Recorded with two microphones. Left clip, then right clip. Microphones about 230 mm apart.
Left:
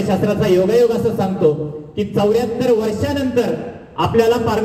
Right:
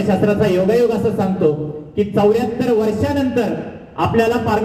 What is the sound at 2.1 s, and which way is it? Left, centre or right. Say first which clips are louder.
A man's voice: even; right.